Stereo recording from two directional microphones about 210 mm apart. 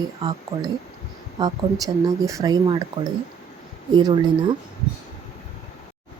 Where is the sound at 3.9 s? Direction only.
20° right (ahead or behind).